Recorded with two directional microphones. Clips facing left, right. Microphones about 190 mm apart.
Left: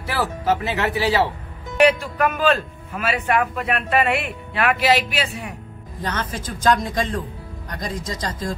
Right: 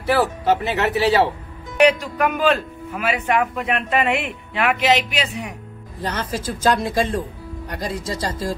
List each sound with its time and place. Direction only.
0.0 s speech: centre (ahead or behind)
1.8 s speech: 15° right (ahead or behind)